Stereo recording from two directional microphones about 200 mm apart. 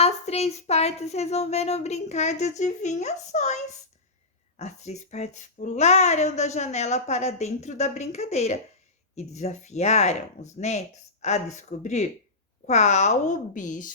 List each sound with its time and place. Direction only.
0.0 s speech: 30° left (ahead or behind)